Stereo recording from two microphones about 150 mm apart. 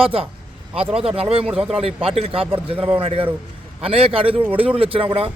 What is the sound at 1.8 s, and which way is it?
A man's voice, 40° right (ahead or behind).